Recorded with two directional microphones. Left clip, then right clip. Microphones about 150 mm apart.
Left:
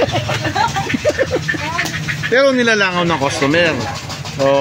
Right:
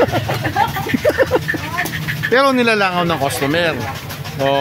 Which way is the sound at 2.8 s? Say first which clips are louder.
Left 1 dB; 15° right (ahead or behind).